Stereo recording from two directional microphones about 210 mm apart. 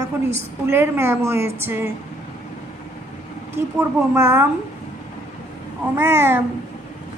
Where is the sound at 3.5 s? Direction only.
10° right (ahead or behind).